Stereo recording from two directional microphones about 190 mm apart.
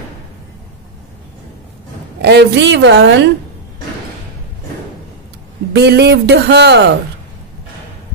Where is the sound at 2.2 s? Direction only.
65° right (ahead or behind).